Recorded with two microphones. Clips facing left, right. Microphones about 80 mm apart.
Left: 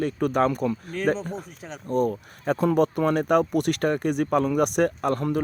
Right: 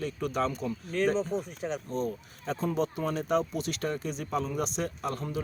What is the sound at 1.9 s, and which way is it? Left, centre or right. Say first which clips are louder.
Speech: left 8 dB; left.